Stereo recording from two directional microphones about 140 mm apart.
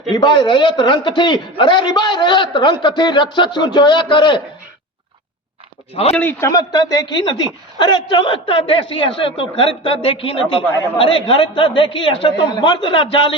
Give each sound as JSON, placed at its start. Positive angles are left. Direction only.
{"t": 0.1, "sound": "a man's voice", "side_deg": 30}
{"t": 6.1, "sound": "a man's voice", "side_deg": 10}
{"t": 6.5, "sound": "a man's voice", "side_deg": 30}